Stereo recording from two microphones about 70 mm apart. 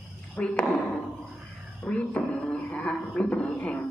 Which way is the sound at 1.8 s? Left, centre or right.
Centre.